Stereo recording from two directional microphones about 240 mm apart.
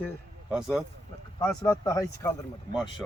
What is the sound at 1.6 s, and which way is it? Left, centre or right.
Speech, centre.